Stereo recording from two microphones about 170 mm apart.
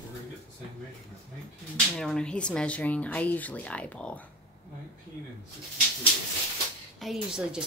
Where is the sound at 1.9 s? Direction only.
5° left (ahead or behind).